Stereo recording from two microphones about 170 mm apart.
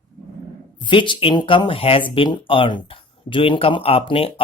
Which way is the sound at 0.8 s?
30° left (ahead or behind).